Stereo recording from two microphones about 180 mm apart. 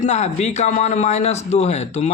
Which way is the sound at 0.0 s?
40° left (ahead or behind).